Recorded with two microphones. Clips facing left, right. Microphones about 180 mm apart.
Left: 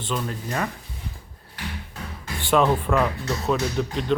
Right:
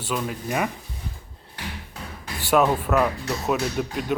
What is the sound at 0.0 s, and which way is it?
Speech, 10° right (ahead or behind).